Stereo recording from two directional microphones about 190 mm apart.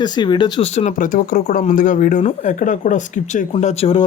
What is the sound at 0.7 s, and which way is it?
Speech, 35° left (ahead or behind).